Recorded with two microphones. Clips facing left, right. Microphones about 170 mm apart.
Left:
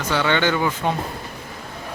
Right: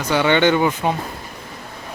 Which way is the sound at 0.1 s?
15° right (ahead or behind).